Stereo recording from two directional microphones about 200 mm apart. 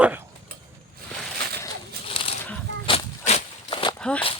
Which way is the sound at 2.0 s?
25° left (ahead or behind).